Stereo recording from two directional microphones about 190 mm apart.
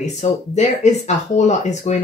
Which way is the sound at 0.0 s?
35° left (ahead or behind).